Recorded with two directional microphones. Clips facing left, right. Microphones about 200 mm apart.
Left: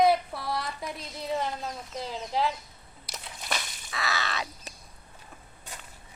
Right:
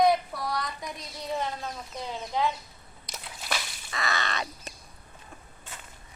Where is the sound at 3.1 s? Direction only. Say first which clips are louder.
Even; centre (ahead or behind).